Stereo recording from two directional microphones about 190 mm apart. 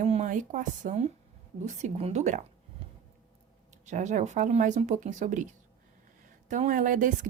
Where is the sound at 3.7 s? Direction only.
40° right (ahead or behind).